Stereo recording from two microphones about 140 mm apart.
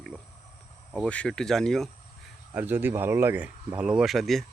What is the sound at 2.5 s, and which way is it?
Speech, 10° right (ahead or behind).